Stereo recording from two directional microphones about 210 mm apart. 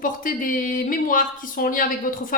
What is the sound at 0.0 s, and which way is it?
Speech, 40° left (ahead or behind).